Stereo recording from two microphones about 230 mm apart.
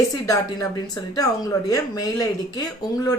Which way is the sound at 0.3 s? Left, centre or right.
Centre.